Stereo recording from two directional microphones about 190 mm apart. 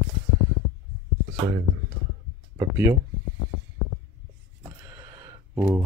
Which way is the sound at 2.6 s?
15° right (ahead or behind).